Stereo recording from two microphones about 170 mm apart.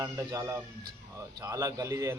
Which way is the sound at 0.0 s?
20° right (ahead or behind).